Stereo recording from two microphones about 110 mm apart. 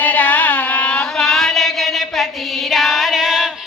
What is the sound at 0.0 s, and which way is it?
Music, 15° left (ahead or behind).